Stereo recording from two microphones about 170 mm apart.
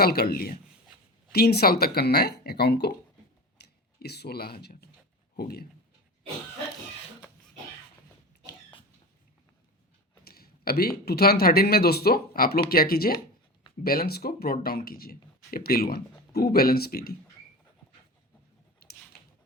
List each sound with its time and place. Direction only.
0.0 s speech: 65° left (ahead or behind)
10.2 s speech: 65° left (ahead or behind)